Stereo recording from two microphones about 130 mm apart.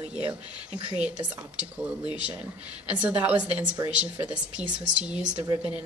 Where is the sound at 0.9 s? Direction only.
10° right (ahead or behind).